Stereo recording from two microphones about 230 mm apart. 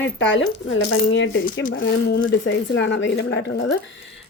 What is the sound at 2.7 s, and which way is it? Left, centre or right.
Speech, left.